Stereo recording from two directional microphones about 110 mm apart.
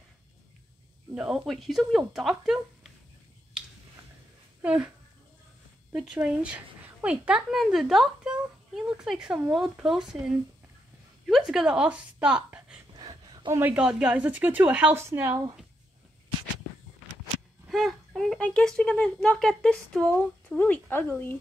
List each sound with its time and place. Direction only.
1.1 s speech: 5° right (ahead or behind)
4.6 s a woman's voice: 10° right (ahead or behind)
6.2 s a woman's voice: 10° right (ahead or behind)
11.2 s a woman's voice: centre (ahead or behind)
12.9 s a sound: 40° right (ahead or behind)
13.6 s a woman's voice: 15° right (ahead or behind)
17.6 s speech: centre (ahead or behind); by 21.4 s 20° left (ahead or behind)